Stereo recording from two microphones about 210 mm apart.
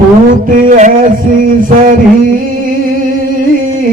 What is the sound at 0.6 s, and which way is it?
Music, 40° right (ahead or behind).